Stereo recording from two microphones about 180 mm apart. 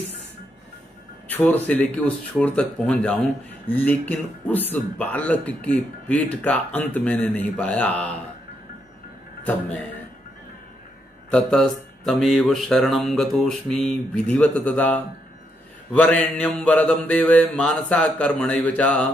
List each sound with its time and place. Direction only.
1.3 s speech: 10° left (ahead or behind)
9.5 s speech: 10° left (ahead or behind)
11.2 s speech: 5° left (ahead or behind)